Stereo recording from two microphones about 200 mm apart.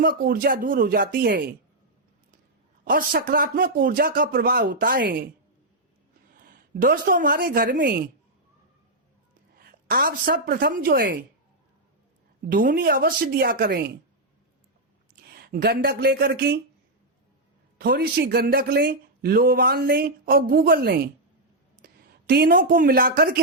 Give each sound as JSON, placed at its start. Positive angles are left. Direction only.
{"t": 0.0, "sound": "speech", "side_deg": -45}
{"t": 2.8, "sound": "speech", "side_deg": -45}
{"t": 6.3, "sound": "a woman's voice", "side_deg": -45}
{"t": 9.8, "sound": "speech", "side_deg": -45}
{"t": 12.5, "sound": "speech", "side_deg": -45}
{"t": 15.4, "sound": "speech", "side_deg": -50}
{"t": 17.7, "sound": "speech", "side_deg": -50}
{"t": 21.8, "sound": "a sound", "side_deg": -45}
{"t": 22.3, "sound": "speech", "side_deg": -50}